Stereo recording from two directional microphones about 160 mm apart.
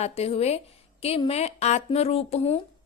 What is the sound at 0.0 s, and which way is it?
A woman's voice, 40° left (ahead or behind).